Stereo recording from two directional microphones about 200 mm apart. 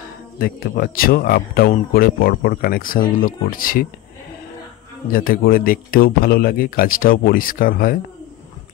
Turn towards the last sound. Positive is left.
turn(degrees=45)  # may be behind; listen again after turning